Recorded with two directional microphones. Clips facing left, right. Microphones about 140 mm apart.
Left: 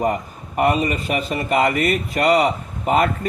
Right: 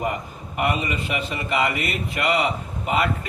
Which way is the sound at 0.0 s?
40° left (ahead or behind).